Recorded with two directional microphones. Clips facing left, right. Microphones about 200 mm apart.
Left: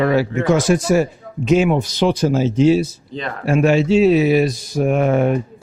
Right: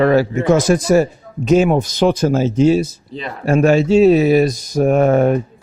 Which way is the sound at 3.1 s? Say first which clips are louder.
Left 1 dB; 5° right (ahead or behind).